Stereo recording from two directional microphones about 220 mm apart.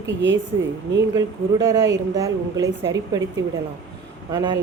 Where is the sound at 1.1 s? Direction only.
15° right (ahead or behind).